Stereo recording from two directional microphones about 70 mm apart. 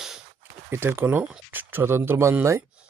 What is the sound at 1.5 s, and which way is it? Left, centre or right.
Speech, right.